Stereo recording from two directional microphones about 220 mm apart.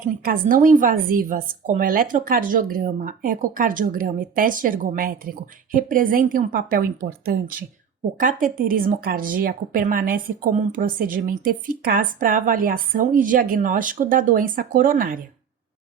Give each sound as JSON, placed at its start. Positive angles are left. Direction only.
{"t": 0.3, "sound": "speech", "side_deg": -40}